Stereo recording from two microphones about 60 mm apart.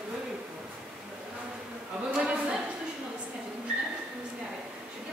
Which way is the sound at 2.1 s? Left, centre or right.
Centre.